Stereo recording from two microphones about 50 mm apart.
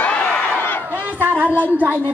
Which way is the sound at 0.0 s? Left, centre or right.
Left.